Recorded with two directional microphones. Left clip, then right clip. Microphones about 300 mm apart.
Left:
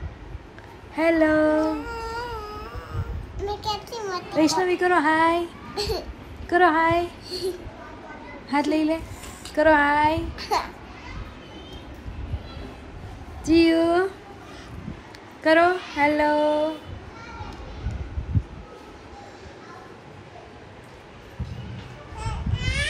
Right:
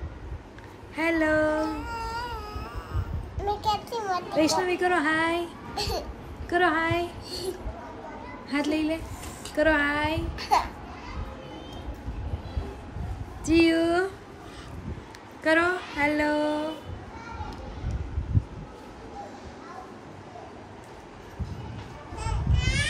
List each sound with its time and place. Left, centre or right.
0.9 s speech: centre
1.7 s a sound: centre
3.3 s a sound: right
4.4 s speech: centre
5.8 s speech: centre
6.5 s speech: centre
7.2 s speech: centre
8.5 s speech: centre
10.3 s speech: centre
13.5 s speech: centre
15.4 s speech: centre
22.5 s a sound: centre